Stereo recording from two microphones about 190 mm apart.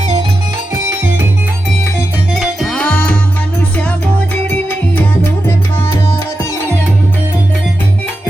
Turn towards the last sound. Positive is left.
turn(degrees=15)  # may be behind; listen again after turning